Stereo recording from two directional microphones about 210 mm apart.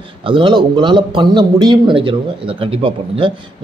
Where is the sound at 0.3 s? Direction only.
20° right (ahead or behind).